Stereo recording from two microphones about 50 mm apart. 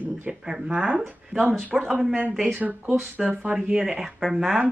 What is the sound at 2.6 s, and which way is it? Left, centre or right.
A woman's voice, right.